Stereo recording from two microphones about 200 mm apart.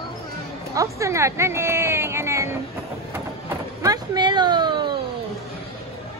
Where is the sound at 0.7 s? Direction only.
15° right (ahead or behind).